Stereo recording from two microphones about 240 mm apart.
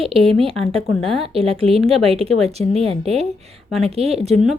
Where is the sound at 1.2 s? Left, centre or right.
Right.